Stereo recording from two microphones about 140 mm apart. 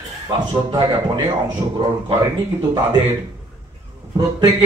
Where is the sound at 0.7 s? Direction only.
30° right (ahead or behind).